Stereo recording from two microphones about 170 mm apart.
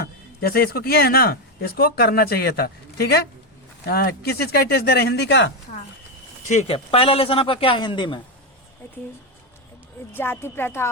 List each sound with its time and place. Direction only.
0.0 s speech: 60° left (ahead or behind); by 5.5 s 85° left
6.5 s speech: 35° left (ahead or behind)
10.2 s speech: 15° left (ahead or behind)